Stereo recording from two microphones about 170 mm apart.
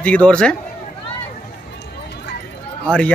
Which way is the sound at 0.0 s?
5° left (ahead or behind).